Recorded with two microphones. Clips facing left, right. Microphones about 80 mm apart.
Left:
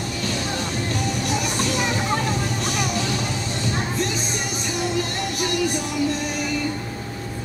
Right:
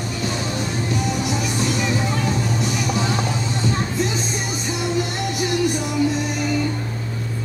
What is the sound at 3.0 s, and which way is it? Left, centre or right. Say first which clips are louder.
Vehicle: right 3 dB; right.